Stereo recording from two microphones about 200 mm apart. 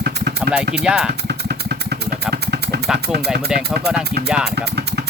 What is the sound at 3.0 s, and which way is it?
Speech, 50° right (ahead or behind).